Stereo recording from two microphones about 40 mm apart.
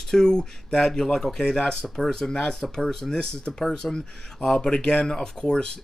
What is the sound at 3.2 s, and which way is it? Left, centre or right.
Speech, left.